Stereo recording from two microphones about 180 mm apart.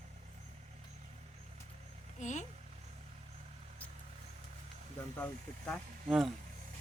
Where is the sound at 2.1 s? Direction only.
40° left (ahead or behind).